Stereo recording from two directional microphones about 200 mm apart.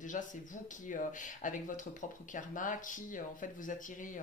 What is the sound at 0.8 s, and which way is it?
Speech, 40° left (ahead or behind).